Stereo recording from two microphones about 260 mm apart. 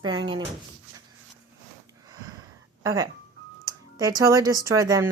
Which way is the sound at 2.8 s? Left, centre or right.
Centre.